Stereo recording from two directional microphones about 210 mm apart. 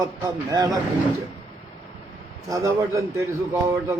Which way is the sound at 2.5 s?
15° right (ahead or behind).